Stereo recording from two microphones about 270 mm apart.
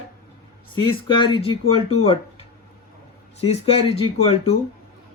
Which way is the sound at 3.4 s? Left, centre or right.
Left.